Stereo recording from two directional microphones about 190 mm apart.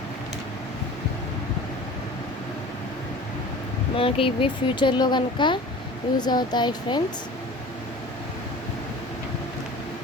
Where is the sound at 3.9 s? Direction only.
30° left (ahead or behind).